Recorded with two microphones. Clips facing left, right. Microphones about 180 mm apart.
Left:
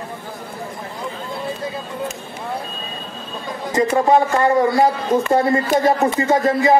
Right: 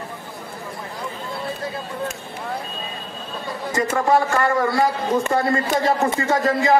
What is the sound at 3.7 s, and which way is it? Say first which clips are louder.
A man's voice: left 4 dB; 20° left (ahead or behind).